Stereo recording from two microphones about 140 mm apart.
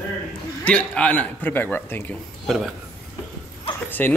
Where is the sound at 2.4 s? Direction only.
Centre (ahead or behind).